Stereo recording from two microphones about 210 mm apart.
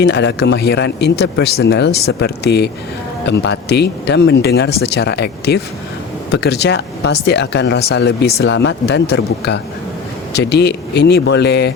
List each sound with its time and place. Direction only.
0.0 s speech: 55° left (ahead or behind)